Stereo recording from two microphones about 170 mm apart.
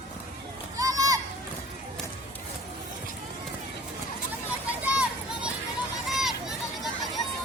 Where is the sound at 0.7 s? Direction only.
20° right (ahead or behind).